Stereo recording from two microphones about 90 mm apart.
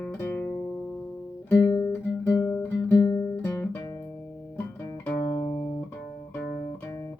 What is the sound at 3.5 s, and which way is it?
Guitar, 25° left (ahead or behind).